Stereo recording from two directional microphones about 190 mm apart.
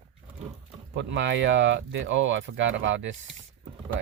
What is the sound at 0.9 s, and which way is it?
Speech, 70° right (ahead or behind).